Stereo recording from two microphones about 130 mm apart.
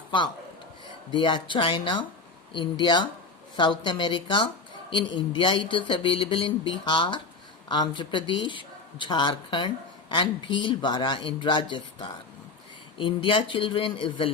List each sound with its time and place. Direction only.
1.1 s speech: 40° left (ahead or behind)